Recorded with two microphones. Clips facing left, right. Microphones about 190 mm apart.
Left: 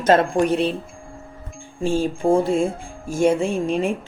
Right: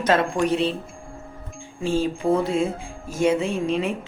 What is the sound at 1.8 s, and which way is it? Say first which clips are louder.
Speech: left 2 dB; 50° left (ahead or behind).